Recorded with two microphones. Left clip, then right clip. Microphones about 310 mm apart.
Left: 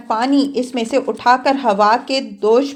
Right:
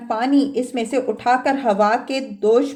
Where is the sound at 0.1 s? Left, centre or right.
Centre.